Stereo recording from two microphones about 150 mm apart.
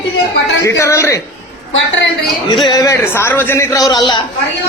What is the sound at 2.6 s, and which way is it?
A man's voice, 25° left (ahead or behind).